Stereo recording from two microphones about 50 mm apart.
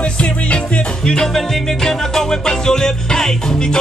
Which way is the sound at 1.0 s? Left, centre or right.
Centre.